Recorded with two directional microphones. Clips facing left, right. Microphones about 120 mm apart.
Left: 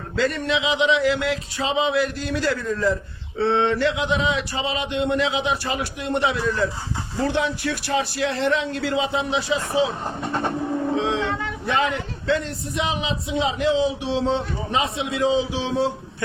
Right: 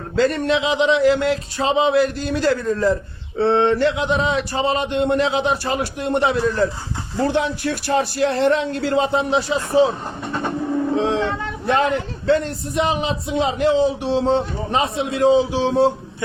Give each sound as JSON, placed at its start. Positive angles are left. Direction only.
{"t": 0.2, "sound": "a man's voice", "side_deg": -40}
{"t": 11.0, "sound": "speech", "side_deg": -40}